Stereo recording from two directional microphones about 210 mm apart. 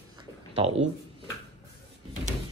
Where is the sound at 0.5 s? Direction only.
30° right (ahead or behind).